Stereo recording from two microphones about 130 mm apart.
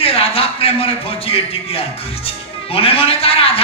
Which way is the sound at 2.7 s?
45° left (ahead or behind).